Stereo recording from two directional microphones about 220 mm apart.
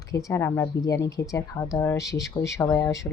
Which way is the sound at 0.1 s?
15° left (ahead or behind).